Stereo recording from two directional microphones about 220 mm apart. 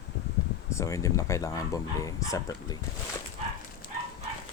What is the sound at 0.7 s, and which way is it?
Speech, 15° left (ahead or behind).